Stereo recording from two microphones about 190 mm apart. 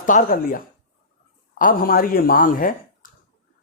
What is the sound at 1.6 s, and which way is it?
Speech, 50° left (ahead or behind).